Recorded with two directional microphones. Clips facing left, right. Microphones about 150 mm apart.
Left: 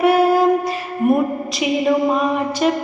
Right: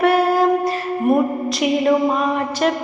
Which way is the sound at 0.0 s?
5° left (ahead or behind).